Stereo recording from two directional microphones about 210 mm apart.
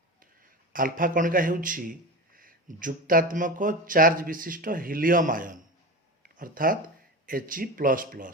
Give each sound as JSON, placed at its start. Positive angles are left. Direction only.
{"t": 0.7, "sound": "a man's voice", "side_deg": -40}